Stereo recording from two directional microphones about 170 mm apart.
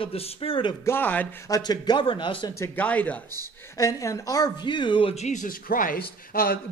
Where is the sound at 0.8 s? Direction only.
10° left (ahead or behind).